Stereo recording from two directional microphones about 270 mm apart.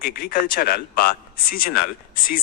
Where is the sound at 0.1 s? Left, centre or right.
Left.